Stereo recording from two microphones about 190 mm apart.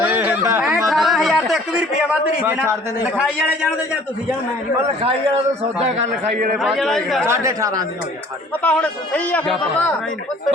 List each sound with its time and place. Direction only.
0.1 s a sound: 10° right (ahead or behind)
0.9 s a man's voice: centre (ahead or behind)
6.6 s a man's voice: centre (ahead or behind)
7.3 s a man's voice: 15° right (ahead or behind)
8.6 s speech: 10° left (ahead or behind)